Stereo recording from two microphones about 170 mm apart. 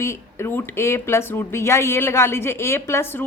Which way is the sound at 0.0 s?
15° left (ahead or behind).